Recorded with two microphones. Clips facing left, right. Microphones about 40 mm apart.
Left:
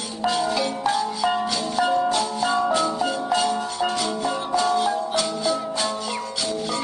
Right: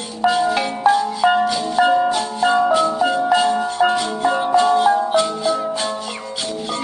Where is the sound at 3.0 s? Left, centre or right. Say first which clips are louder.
Right 6 dB; right.